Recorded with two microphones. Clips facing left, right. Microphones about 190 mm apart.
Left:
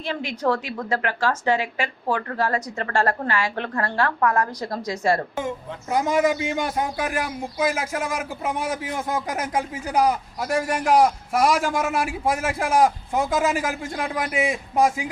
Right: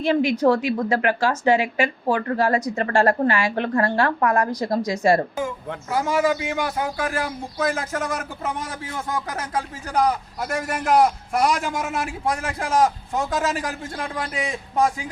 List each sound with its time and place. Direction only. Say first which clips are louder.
0.0 s a woman's voice: right 7 dB; 15° right (ahead or behind)
5.4 s a man's voice: right 1 dB; 20° left (ahead or behind)